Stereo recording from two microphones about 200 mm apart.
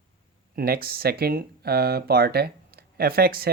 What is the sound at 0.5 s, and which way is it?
Speech, 50° right (ahead or behind).